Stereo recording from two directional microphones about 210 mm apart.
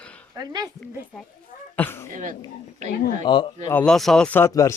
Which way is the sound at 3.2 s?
25° left (ahead or behind).